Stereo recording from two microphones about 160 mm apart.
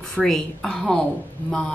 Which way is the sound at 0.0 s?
5° left (ahead or behind).